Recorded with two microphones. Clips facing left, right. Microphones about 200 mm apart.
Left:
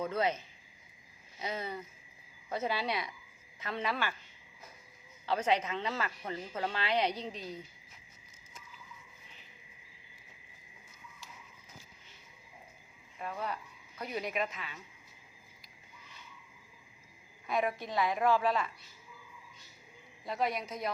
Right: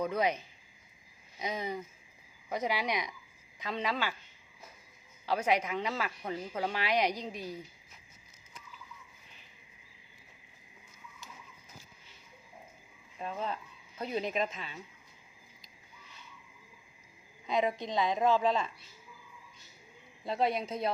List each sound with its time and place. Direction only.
0.0 s speech: 15° right (ahead or behind)
1.4 s speech: 15° right (ahead or behind)
5.2 s speech: 10° right (ahead or behind)
13.1 s a woman's voice: 20° right (ahead or behind)
17.4 s a woman's voice: 20° right (ahead or behind)
20.2 s a woman's voice: 30° right (ahead or behind)